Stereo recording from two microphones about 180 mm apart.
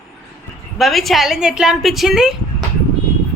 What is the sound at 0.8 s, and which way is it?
A man's voice, centre (ahead or behind).